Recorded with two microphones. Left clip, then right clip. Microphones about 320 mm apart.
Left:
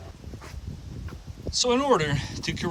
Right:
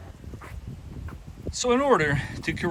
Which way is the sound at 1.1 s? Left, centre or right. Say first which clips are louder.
Left 2 dB; centre.